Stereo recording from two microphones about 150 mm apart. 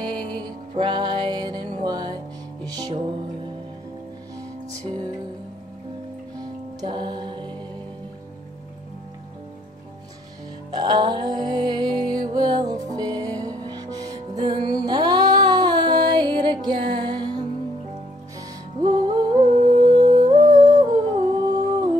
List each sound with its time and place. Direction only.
0.0 s music: 30° right (ahead or behind)
4.7 s music: 20° right (ahead or behind)
6.8 s music: 30° right (ahead or behind)
10.7 s music: 25° right (ahead or behind)
18.8 s humming: 25° right (ahead or behind)